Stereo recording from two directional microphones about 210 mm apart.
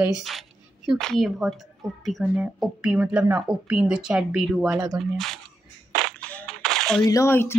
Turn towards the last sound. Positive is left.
turn(degrees=10)  # may be behind; listen again after turning